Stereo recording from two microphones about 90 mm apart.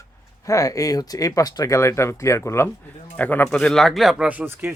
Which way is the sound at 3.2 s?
20° left (ahead or behind).